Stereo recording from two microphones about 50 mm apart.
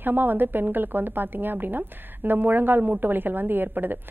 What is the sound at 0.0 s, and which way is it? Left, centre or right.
A woman's voice, right.